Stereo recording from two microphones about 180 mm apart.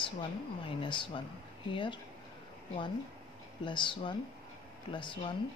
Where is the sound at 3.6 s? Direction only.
25° left (ahead or behind).